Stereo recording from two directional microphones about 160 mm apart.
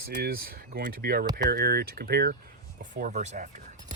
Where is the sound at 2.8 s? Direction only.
50° right (ahead or behind).